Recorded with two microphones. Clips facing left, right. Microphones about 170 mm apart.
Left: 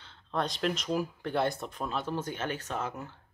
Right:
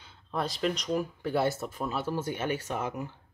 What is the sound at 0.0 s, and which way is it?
Speech, 10° right (ahead or behind).